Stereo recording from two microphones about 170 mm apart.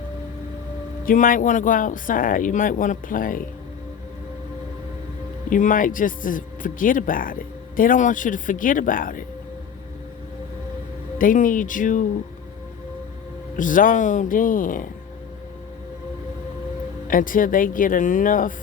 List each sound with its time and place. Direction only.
1.0 s speech: 50° left (ahead or behind)
5.5 s speech: 50° left (ahead or behind)
11.2 s speech: 50° left (ahead or behind)
13.6 s speech: 50° left (ahead or behind)
17.1 s speech: 55° left (ahead or behind)